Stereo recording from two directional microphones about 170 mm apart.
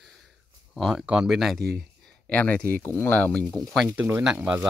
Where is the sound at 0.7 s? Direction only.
Centre (ahead or behind).